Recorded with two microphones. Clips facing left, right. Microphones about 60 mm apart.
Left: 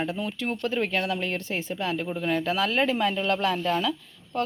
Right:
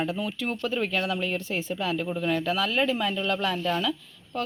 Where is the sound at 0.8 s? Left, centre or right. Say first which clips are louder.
Left 1 dB; left.